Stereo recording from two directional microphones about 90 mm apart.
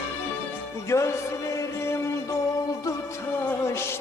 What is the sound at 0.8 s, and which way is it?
Music, 35° left (ahead or behind).